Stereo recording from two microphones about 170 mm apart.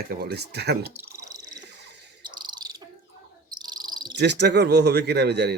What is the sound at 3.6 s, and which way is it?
Cricket, 25° right (ahead or behind).